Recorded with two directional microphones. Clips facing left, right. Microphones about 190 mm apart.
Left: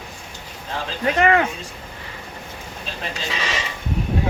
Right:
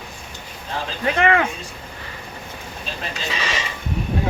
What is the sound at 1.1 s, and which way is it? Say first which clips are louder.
Speech: left 1 dB; 40° left (ahead or behind).